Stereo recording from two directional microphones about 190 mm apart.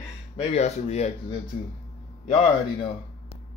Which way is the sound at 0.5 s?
35° left (ahead or behind).